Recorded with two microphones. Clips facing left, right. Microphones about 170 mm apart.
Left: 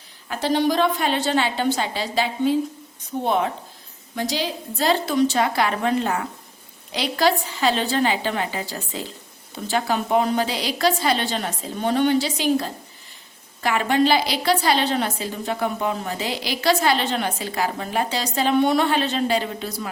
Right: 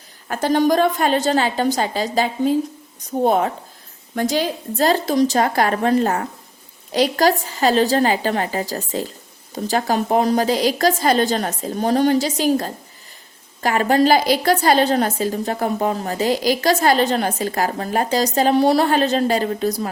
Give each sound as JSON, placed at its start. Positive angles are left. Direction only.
{"t": 0.3, "sound": "a woman's voice", "side_deg": -45}